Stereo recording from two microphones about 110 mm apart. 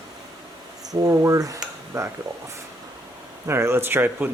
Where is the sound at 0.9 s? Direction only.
30° right (ahead or behind).